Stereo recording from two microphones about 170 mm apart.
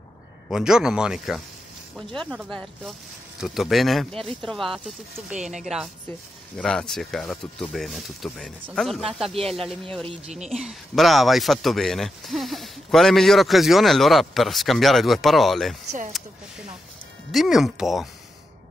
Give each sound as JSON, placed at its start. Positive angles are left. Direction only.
{"t": 0.5, "sound": "speech", "side_deg": -5}
{"t": 10.0, "sound": "speech", "side_deg": -40}
{"t": 10.5, "sound": "speech", "side_deg": 0}
{"t": 17.3, "sound": "speech", "side_deg": 0}